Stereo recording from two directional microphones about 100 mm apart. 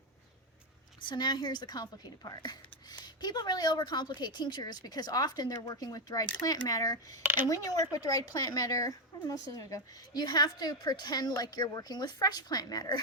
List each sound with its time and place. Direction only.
1.0 s a woman's voice: 45° left (ahead or behind)
7.2 s speech: 20° right (ahead or behind)
7.4 s a woman's voice: 40° left (ahead or behind)